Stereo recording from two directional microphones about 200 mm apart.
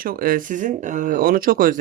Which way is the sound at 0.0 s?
45° right (ahead or behind).